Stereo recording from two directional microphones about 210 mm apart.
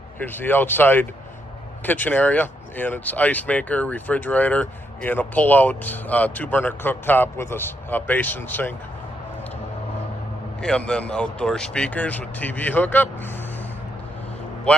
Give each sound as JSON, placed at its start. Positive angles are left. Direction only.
{"t": 0.2, "sound": "speech", "side_deg": 10}
{"t": 10.6, "sound": "speech", "side_deg": 5}
{"t": 14.7, "sound": "speech", "side_deg": 5}